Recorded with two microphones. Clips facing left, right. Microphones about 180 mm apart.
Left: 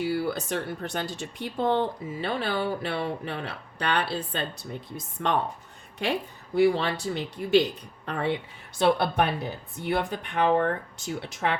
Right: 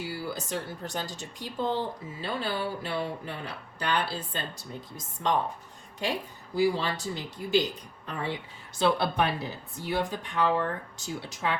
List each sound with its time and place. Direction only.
0.0 s speech: 60° left (ahead or behind)
6.6 s speech: 60° left (ahead or behind)